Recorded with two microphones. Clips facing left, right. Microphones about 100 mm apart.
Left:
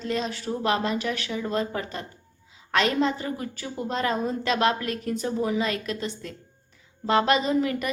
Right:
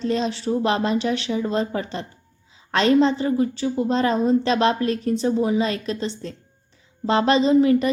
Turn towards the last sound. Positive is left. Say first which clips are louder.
# right 8 dB
turn(degrees=-25)  # may be behind; listen again after turning